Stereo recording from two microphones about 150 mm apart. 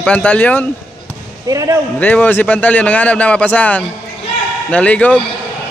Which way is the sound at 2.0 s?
10° left (ahead or behind).